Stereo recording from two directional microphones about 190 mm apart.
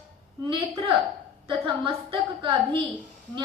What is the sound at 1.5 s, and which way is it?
A woman's voice, 25° right (ahead or behind).